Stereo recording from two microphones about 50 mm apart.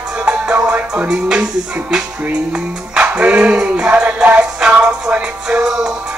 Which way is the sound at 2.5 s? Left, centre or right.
Right.